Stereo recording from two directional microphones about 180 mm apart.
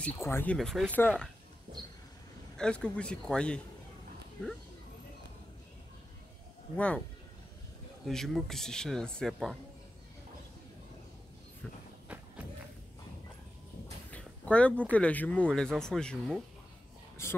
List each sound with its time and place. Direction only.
0.0 s speech: 10° left (ahead or behind)
1.7 s a sound: 30° right (ahead or behind)
2.5 s speech: 5° left (ahead or behind)
8.0 s speech: centre (ahead or behind)
12.1 s thump: 5° right (ahead or behind)
14.1 s speech: 5° left (ahead or behind)
17.2 s speech: 15° left (ahead or behind)